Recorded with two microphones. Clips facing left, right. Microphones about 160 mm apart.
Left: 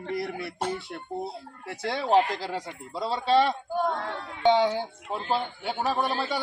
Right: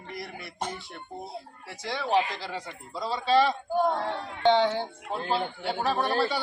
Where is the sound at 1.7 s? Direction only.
60° left (ahead or behind).